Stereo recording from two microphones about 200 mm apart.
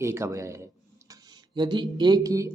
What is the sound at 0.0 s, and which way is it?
Speech, 15° right (ahead or behind).